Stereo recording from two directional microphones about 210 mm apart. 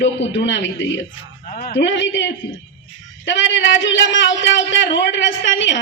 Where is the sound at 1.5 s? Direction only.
35° left (ahead or behind).